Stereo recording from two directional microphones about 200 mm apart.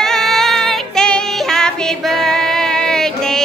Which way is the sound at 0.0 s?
Centre (ahead or behind).